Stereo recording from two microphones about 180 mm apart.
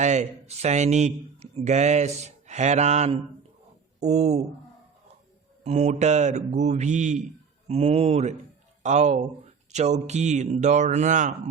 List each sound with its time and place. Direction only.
0.0 s speech: 40° right (ahead or behind)
5.6 s a man's voice: 40° right (ahead or behind)